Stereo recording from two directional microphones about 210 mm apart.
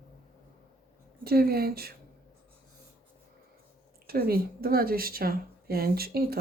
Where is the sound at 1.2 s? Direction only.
45° right (ahead or behind).